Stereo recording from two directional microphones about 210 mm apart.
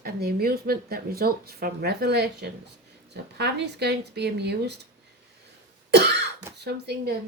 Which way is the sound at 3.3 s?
50° right (ahead or behind).